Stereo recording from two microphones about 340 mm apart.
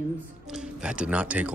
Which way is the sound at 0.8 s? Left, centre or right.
Centre.